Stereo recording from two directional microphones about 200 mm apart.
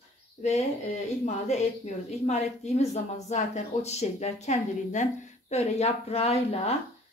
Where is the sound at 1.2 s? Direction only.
35° left (ahead or behind).